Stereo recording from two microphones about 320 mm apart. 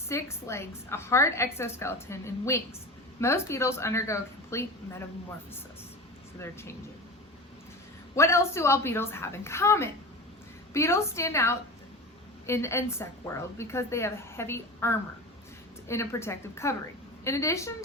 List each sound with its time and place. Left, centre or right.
0.1 s a woman's voice: centre
6.4 s a woman's voice: centre
8.1 s a woman's voice: centre